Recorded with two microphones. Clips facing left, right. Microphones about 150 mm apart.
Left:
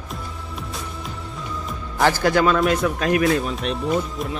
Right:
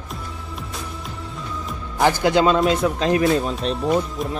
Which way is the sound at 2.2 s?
20° right (ahead or behind).